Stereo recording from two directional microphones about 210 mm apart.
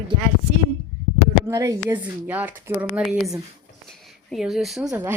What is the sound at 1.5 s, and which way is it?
A woman's voice, 15° right (ahead or behind).